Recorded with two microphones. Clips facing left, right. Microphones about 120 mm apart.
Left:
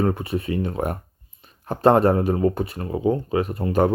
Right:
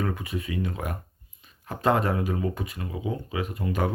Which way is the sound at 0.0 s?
35° left (ahead or behind).